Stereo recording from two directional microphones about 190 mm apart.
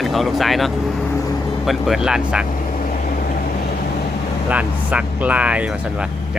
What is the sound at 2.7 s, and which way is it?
Vehicle, 45° left (ahead or behind).